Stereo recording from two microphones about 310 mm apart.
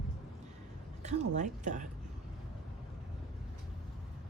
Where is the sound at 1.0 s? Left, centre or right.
Right.